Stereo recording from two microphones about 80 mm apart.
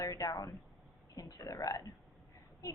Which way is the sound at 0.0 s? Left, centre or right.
Left.